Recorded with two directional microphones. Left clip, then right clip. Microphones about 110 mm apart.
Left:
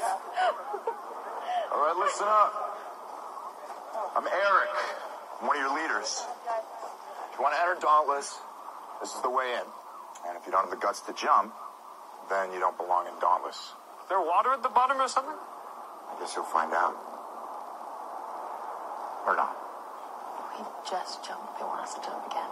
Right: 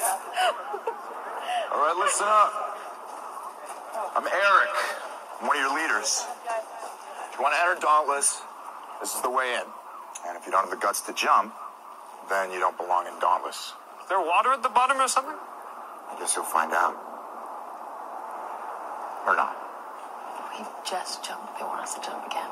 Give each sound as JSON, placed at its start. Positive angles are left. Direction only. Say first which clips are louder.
{"t": 0.0, "sound": "a sound", "louder": "right 2 dB", "side_deg": -25}
{"t": 3.9, "sound": "speech", "louder": "right 3 dB", "side_deg": -25}
{"t": 19.2, "sound": "speech", "louder": "right 4 dB", "side_deg": -25}
{"t": 20.5, "sound": "speech", "louder": "right 2 dB", "side_deg": -25}